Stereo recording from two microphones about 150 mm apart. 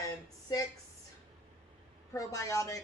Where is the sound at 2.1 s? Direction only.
20° left (ahead or behind).